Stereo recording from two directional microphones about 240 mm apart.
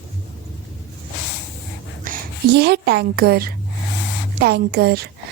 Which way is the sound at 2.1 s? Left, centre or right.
Right.